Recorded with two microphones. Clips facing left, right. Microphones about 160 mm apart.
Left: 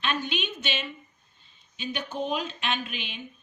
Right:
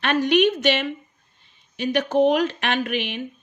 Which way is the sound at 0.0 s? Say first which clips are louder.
Right 12 dB; 75° right (ahead or behind).